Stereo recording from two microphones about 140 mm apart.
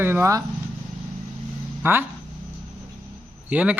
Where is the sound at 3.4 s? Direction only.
10° right (ahead or behind).